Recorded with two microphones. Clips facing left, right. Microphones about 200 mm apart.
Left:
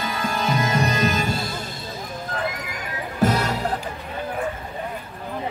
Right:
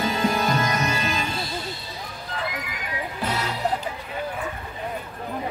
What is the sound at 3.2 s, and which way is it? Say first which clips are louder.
Music: left 8 dB; 45° left (ahead or behind).